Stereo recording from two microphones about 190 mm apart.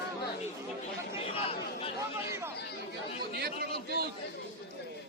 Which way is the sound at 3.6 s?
55° right (ahead or behind).